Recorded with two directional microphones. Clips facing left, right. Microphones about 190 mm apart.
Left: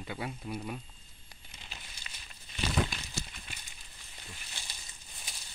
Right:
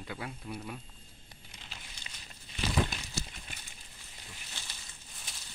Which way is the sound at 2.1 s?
25° right (ahead or behind).